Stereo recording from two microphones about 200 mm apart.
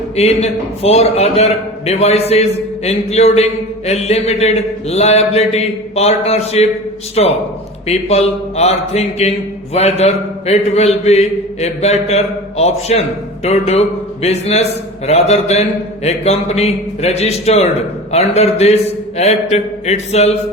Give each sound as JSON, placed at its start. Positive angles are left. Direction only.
{"t": 0.2, "sound": "speech", "side_deg": 30}